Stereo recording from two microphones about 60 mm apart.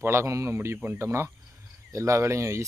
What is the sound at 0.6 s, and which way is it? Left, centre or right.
Speech, right.